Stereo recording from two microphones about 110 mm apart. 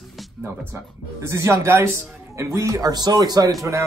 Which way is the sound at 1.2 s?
25° right (ahead or behind).